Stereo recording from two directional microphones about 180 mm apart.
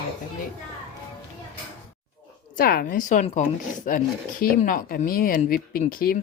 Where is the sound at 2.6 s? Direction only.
55° left (ahead or behind).